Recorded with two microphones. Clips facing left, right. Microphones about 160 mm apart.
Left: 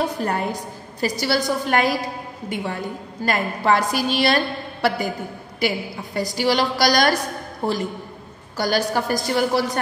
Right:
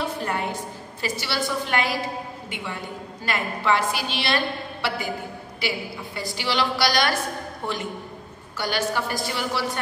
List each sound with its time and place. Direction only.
0.0 s a woman's voice: 40° left (ahead or behind)